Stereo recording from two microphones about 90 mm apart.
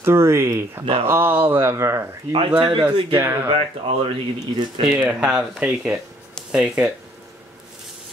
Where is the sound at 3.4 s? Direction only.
90° right.